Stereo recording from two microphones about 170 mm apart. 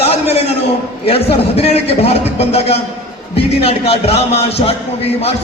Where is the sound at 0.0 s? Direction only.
35° left (ahead or behind).